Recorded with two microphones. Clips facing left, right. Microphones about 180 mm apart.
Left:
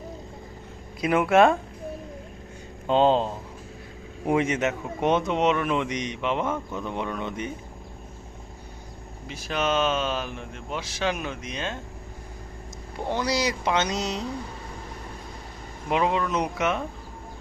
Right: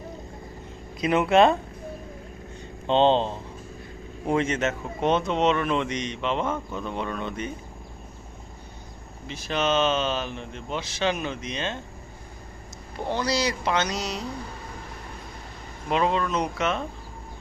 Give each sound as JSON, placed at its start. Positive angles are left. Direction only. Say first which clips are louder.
{"t": 1.0, "sound": "speech", "louder": "even", "side_deg": 10}
{"t": 2.8, "sound": "speech", "louder": "even", "side_deg": 5}
{"t": 9.2, "sound": "speech", "louder": "right 1 dB", "side_deg": 5}
{"t": 13.1, "sound": "speech", "louder": "even", "side_deg": 15}
{"t": 15.9, "sound": "speech", "louder": "even", "side_deg": 15}